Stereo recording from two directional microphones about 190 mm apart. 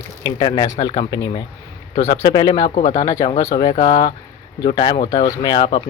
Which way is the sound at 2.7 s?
40° left (ahead or behind).